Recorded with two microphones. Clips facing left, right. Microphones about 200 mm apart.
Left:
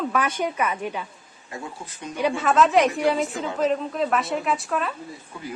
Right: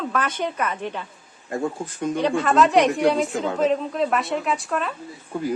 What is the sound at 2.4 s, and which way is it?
A woman's voice, centre (ahead or behind).